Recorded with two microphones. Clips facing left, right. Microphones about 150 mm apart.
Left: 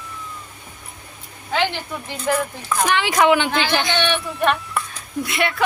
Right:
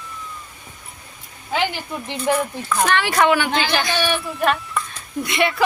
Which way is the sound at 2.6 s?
15° left (ahead or behind).